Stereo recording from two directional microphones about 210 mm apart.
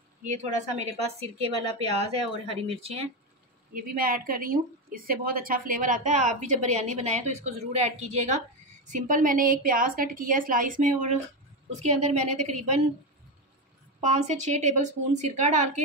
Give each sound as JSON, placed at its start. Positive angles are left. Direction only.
{"t": 0.4, "sound": "speech", "side_deg": -35}
{"t": 3.7, "sound": "speech", "side_deg": -45}
{"t": 14.0, "sound": "speech", "side_deg": -35}